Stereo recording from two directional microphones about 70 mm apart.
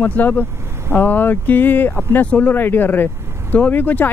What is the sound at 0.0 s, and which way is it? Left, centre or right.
Speech, left.